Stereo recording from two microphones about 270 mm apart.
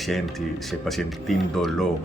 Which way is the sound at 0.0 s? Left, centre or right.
Centre.